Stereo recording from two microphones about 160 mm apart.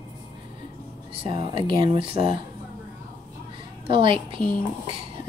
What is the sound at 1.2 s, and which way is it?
Speech, 35° right (ahead or behind).